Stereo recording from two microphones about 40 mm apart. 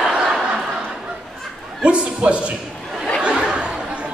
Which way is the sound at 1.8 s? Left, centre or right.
Right.